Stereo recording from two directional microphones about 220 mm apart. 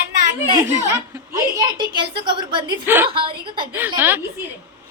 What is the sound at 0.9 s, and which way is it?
A woman's voice, 15° right (ahead or behind).